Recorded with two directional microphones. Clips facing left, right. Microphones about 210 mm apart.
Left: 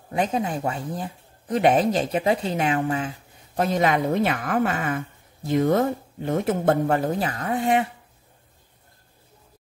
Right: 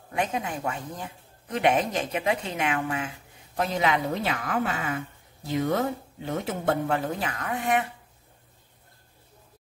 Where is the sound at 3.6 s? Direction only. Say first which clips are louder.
Left 4 dB; 45° left (ahead or behind); by 7.8 s 30° left (ahead or behind).